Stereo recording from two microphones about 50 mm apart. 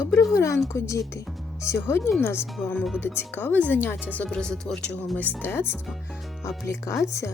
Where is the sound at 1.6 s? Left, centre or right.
Left.